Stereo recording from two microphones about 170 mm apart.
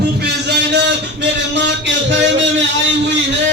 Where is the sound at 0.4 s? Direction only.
85° right.